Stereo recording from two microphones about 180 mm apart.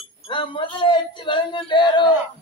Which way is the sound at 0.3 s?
30° left (ahead or behind).